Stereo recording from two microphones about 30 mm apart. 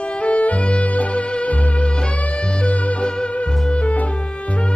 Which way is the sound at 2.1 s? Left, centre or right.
Left.